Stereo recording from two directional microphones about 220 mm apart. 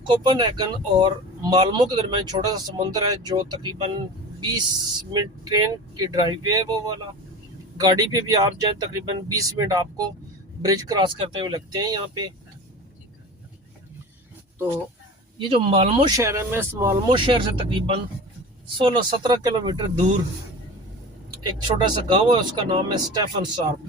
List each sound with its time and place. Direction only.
0.1 s speech: 20° right (ahead or behind)
15.4 s speech: 25° right (ahead or behind); by 16.9 s 10° right (ahead or behind)
17.1 s speech: 25° right (ahead or behind)
21.2 s speech: 20° right (ahead or behind)